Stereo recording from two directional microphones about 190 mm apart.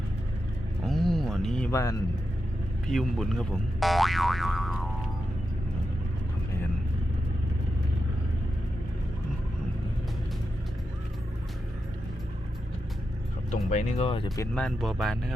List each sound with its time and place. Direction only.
0.9 s a sound: centre (ahead or behind)
1.7 s speech: 15° left (ahead or behind)
2.9 s speech: centre (ahead or behind)
13.7 s speech: 40° left (ahead or behind)
14.5 s speech: 5° left (ahead or behind)